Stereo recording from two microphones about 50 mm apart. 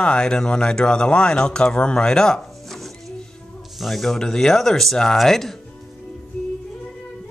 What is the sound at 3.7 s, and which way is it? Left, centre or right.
Speech, centre.